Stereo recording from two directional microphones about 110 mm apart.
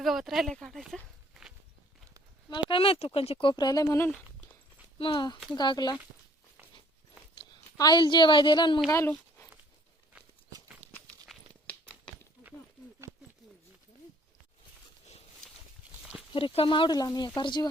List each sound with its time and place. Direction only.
0.0 s speech: centre (ahead or behind)
1.3 s walk: 5° right (ahead or behind)
2.5 s speech: 50° left (ahead or behind)
3.5 s speech: 35° left (ahead or behind)
4.9 s speech: 45° left (ahead or behind)
7.5 s a woman's voice: 40° left (ahead or behind)
8.9 s speech: 25° left (ahead or behind)
11.3 s a sound: centre (ahead or behind)
16.3 s speech: 60° left (ahead or behind); by 17.7 s 40° left (ahead or behind)